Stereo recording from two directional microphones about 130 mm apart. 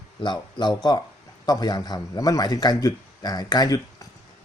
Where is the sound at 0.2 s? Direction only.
35° left (ahead or behind).